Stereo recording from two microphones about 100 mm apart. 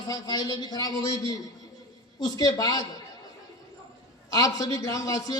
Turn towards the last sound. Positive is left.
turn(degrees=35)  # may be behind; listen again after turning